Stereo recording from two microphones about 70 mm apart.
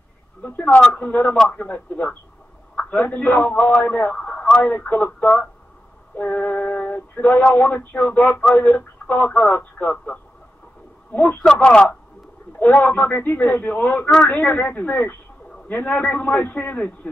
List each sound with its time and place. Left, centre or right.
0.4 s male singing: left
1.3 s speech: centre
1.6 s male singing: left
11.4 s speech: centre
12.5 s male singing: left